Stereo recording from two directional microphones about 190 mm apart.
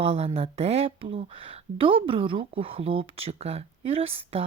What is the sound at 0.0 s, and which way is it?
Speech, 30° right (ahead or behind).